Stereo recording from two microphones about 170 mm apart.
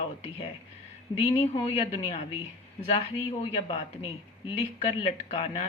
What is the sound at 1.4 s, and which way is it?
A woman's voice, 35° left (ahead or behind).